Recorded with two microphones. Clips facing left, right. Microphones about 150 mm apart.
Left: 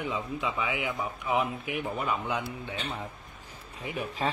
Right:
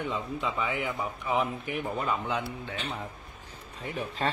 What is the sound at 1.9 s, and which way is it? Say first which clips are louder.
Speech: right 1 dB; 15° left (ahead or behind).